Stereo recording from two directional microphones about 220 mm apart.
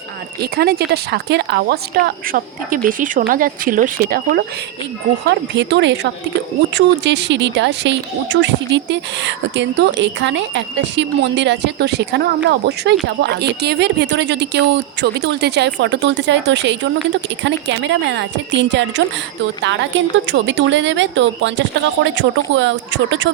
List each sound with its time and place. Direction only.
0.4 s a woman's voice: 45° right (ahead or behind)
5.5 s a woman's voice: 50° right (ahead or behind)